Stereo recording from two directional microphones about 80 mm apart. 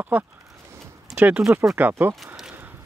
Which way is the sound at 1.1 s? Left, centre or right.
Right.